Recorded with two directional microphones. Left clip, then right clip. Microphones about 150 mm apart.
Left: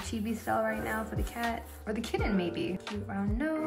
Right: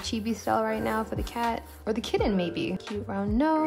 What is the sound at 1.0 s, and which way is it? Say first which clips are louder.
Speech: right 5 dB; centre (ahead or behind).